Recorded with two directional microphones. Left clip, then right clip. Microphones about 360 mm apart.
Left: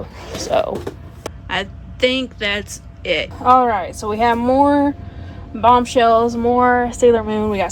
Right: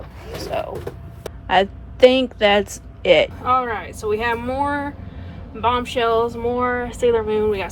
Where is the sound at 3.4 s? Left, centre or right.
Centre.